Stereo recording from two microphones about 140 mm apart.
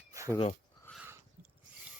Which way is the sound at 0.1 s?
25° right (ahead or behind).